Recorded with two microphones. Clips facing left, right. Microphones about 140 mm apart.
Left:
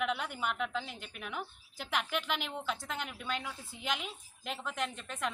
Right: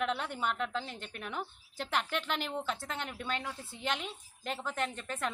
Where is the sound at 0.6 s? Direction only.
5° left (ahead or behind).